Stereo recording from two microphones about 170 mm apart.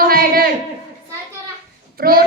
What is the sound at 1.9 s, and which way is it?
Speech, 60° right (ahead or behind).